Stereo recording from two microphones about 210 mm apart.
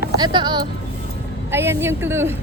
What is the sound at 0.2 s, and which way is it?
Speech, 20° right (ahead or behind).